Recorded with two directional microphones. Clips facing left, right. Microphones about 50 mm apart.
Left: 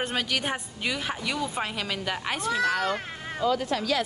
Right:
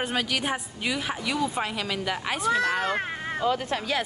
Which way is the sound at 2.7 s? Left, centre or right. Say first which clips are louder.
Right 1 dB; right.